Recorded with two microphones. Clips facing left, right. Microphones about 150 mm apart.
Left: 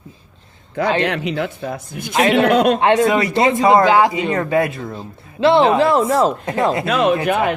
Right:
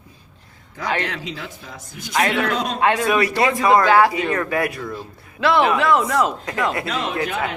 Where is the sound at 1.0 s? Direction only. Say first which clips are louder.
Left 9 dB; 65° left (ahead or behind).